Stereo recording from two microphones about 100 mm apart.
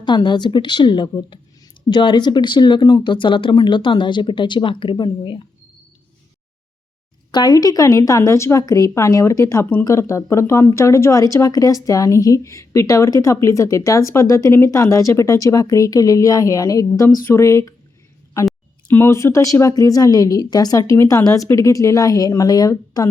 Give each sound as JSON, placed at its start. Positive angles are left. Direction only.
{"t": 0.0, "sound": "speech", "side_deg": 50}
{"t": 7.3, "sound": "speech", "side_deg": 45}
{"t": 18.9, "sound": "speech", "side_deg": 25}